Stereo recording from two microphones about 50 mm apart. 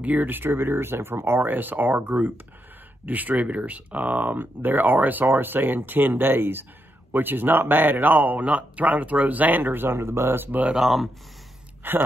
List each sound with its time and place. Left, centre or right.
0.0 s speech: right
10.7 s speech: centre
11.8 s speech: right